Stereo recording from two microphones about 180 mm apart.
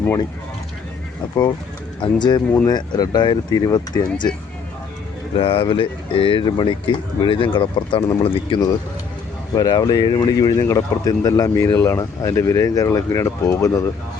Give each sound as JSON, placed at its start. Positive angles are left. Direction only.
{"t": 2.0, "sound": "speech", "side_deg": 25}
{"t": 5.4, "sound": "speech", "side_deg": 30}